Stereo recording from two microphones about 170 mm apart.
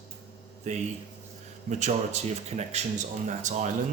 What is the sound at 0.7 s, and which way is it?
Speech, 45° right (ahead or behind).